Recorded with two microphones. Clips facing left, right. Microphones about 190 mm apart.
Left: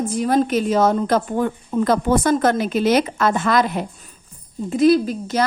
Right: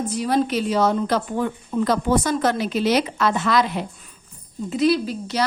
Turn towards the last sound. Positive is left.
turn(degrees=50)  # may be behind; listen again after turning